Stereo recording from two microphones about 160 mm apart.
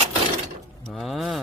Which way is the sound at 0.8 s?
Centre (ahead or behind).